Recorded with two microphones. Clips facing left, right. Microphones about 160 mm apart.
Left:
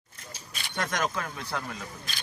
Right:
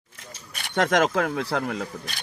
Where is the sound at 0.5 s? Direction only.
75° right (ahead or behind).